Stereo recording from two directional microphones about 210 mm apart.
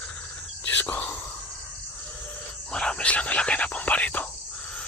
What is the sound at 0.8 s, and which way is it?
Whispering, 5° left (ahead or behind).